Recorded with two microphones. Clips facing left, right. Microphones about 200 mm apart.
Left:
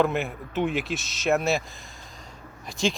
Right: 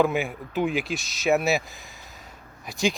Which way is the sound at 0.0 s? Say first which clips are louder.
Right 1 dB; centre (ahead or behind).